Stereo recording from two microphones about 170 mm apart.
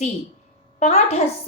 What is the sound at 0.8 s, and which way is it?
Speech, 40° left (ahead or behind).